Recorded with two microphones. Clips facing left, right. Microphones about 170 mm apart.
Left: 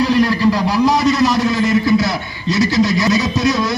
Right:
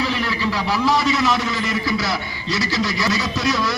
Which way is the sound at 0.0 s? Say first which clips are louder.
Left 9 dB; 40° left (ahead or behind).